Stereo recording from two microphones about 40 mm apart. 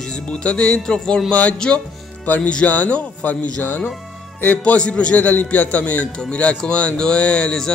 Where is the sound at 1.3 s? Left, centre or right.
Left.